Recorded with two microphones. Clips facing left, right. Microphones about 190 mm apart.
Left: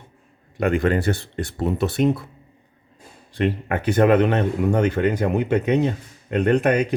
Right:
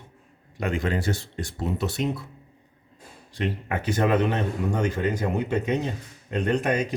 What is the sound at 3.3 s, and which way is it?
Speech, 60° left (ahead or behind).